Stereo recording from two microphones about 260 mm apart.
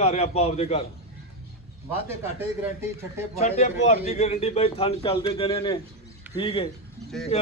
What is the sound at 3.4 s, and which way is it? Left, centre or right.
Speech, left.